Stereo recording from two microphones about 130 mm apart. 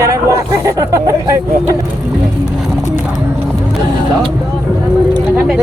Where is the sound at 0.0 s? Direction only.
25° right (ahead or behind).